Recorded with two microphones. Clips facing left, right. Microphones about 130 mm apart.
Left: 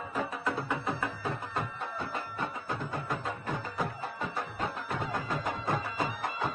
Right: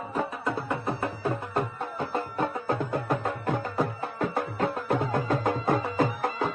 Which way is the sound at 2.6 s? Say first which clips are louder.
Right 8 dB; 60° right (ahead or behind).